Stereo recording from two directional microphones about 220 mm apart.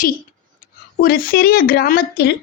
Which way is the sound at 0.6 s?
40° left (ahead or behind).